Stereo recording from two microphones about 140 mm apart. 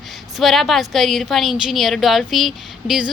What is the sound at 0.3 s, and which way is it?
A woman's voice, centre (ahead or behind).